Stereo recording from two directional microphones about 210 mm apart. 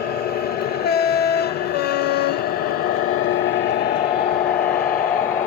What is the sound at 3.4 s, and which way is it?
Vehicle, 60° left (ahead or behind).